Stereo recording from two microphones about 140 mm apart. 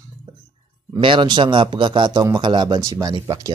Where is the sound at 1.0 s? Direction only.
35° right (ahead or behind).